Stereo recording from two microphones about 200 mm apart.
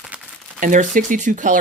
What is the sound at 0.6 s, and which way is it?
Speech, 40° right (ahead or behind).